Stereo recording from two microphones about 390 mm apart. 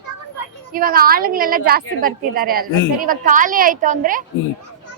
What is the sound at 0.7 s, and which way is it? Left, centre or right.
A woman's voice, right.